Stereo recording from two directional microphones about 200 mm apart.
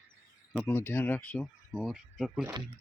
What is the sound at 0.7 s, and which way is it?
Speech, 10° left (ahead or behind).